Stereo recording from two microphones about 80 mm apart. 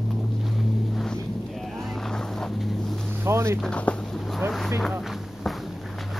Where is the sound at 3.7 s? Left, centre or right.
Centre.